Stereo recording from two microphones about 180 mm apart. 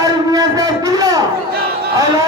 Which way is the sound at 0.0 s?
20° right (ahead or behind).